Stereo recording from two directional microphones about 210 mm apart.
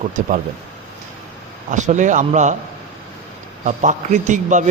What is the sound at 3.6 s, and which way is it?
A man's voice, 35° right (ahead or behind).